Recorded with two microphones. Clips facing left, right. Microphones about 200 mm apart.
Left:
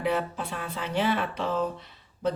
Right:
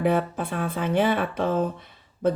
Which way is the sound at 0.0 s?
55° right (ahead or behind).